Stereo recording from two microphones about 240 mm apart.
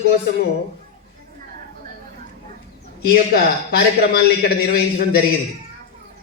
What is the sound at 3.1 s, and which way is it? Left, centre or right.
A man's voice, left.